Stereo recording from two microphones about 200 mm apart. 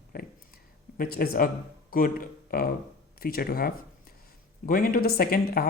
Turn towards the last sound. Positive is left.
turn(degrees=45)  # may be behind; listen again after turning